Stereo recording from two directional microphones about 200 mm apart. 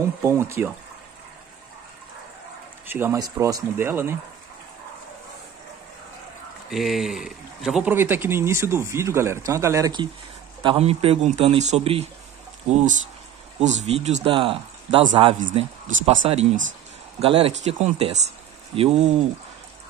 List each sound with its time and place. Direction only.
0.2 s speech: 15° right (ahead or behind)
2.9 s speech: 15° right (ahead or behind)
6.7 s speech: centre (ahead or behind); by 10.0 s 15° right (ahead or behind)
10.6 s a man's voice: 30° right (ahead or behind)